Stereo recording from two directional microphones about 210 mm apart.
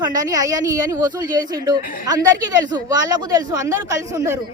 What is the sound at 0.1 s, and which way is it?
Speech, 15° right (ahead or behind).